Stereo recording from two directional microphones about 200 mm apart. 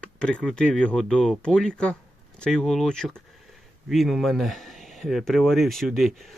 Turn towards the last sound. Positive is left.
turn(degrees=0)  # may be behind; listen again after turning